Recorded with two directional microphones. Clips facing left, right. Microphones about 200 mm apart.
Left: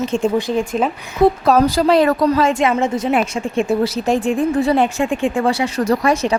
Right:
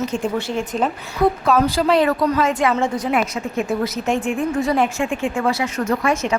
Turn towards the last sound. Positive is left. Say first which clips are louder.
# left 4 dB
turn(degrees=35)  # may be behind; listen again after turning